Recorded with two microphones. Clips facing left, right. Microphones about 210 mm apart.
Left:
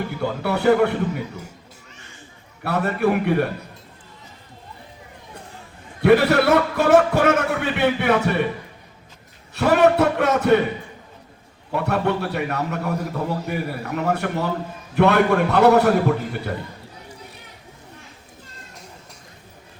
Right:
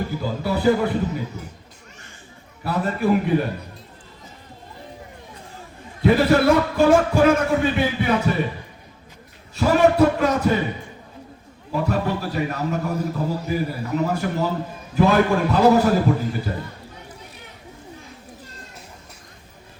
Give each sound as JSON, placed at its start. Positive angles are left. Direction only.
{"t": 0.2, "sound": "a man's voice", "side_deg": 65}
{"t": 2.6, "sound": "a man's voice", "side_deg": 65}
{"t": 6.0, "sound": "a man's voice", "side_deg": 65}
{"t": 9.6, "sound": "a man's voice", "side_deg": 65}
{"t": 11.7, "sound": "a man's voice", "side_deg": 65}